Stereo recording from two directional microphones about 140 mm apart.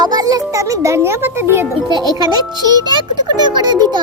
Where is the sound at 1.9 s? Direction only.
30° right (ahead or behind).